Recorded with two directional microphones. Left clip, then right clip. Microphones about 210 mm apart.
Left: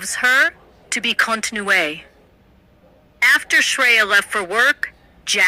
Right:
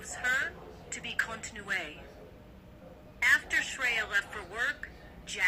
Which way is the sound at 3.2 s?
55° left (ahead or behind).